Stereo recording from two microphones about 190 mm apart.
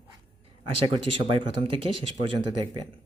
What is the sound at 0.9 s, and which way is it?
Speech, 25° right (ahead or behind).